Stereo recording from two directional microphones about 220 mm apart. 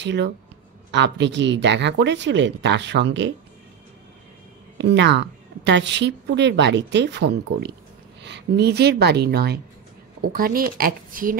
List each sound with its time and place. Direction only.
0.0 s a woman's voice: 50° right (ahead or behind)
4.7 s a woman's voice: 55° right (ahead or behind)